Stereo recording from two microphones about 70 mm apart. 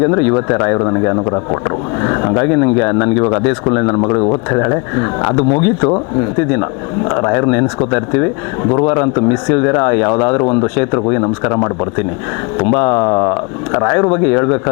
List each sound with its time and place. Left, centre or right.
0.0 s speech: left